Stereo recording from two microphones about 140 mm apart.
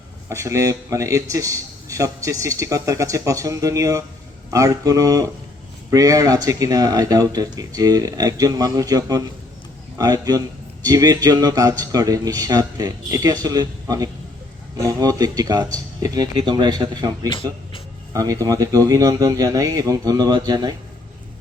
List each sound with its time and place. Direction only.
0.3 s a man's voice: 20° right (ahead or behind)
18.1 s a man's voice: 25° right (ahead or behind)